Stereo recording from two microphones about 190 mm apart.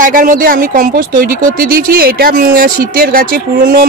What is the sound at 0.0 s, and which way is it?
A man's voice, 45° right (ahead or behind).